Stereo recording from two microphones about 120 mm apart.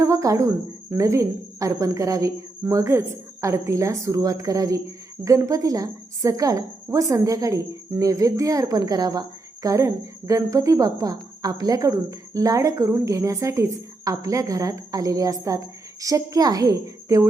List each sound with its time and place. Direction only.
0.0 s speech: 25° right (ahead or behind)